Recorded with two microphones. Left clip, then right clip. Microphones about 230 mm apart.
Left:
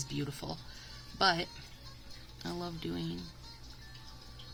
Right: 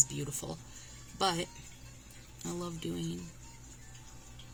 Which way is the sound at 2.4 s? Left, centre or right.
Centre.